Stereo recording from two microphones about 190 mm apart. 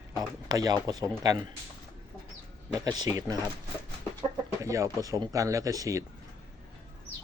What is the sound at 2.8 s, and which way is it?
Speech, 20° right (ahead or behind).